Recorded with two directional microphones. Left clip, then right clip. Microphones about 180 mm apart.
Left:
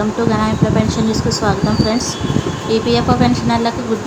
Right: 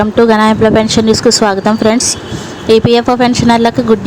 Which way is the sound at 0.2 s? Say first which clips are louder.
Right 12 dB; 50° right (ahead or behind).